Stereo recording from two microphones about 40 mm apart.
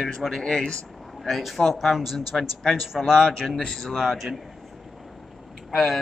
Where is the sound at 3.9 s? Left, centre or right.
Centre.